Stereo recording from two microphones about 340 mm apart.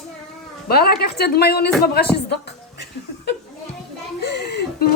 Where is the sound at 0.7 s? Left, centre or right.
Left.